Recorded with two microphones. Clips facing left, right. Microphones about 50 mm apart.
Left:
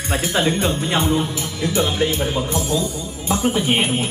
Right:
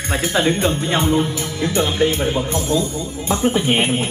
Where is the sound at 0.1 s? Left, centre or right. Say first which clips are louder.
Right 1 dB; right.